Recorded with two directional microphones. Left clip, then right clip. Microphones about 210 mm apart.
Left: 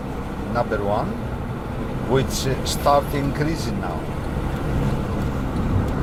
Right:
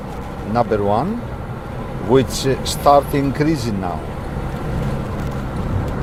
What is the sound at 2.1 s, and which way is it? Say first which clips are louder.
Speech: right 7 dB; 50° right (ahead or behind).